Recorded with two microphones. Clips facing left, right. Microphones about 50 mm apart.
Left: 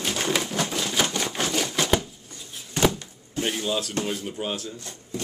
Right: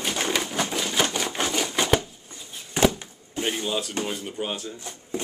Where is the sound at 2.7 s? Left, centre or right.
Centre.